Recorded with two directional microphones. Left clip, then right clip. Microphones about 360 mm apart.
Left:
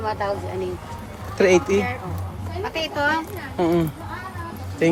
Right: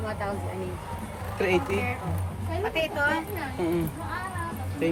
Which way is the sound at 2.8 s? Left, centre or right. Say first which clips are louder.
Left 4 dB; left.